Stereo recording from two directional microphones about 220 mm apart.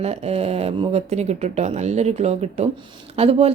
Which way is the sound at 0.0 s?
30° right (ahead or behind).